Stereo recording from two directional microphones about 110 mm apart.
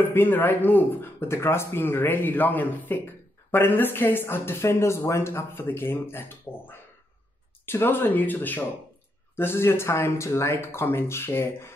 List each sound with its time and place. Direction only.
0.0 s speech: 20° left (ahead or behind)